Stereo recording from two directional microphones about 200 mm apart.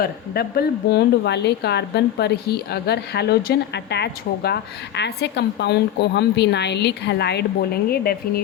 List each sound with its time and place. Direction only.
0.0 s speech: 50° left (ahead or behind)